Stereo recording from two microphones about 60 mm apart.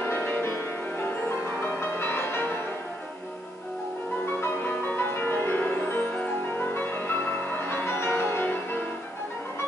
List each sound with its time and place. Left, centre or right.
0.0 s music: left
4.4 s music: left